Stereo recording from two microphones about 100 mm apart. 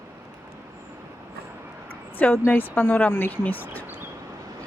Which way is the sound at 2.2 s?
20° left (ahead or behind).